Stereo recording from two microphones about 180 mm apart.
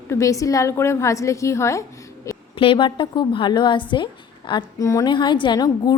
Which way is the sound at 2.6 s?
30° left (ahead or behind).